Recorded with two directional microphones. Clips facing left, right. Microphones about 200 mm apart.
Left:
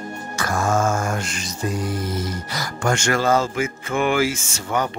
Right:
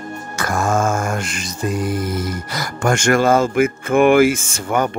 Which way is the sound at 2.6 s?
55° right (ahead or behind).